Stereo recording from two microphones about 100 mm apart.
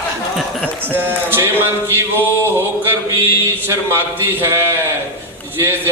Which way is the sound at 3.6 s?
20° right (ahead or behind).